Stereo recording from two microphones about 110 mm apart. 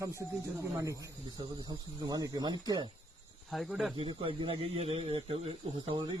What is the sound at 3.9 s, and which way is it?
Speech, 50° right (ahead or behind).